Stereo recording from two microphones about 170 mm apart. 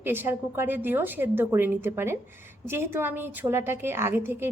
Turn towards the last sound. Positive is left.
turn(degrees=-15)  # may be behind; listen again after turning